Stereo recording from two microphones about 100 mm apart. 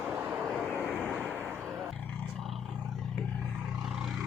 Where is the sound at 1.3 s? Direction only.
20° right (ahead or behind).